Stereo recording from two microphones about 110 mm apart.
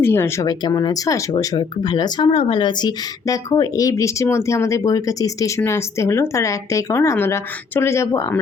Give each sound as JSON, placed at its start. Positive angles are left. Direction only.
{"t": 0.0, "sound": "speech", "side_deg": 20}
{"t": 0.4, "sound": "speech", "side_deg": 35}